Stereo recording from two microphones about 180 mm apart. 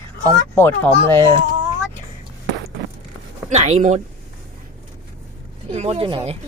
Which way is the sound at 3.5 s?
40° right (ahead or behind).